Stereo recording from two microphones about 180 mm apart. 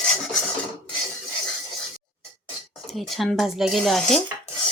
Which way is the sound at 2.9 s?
Centre (ahead or behind).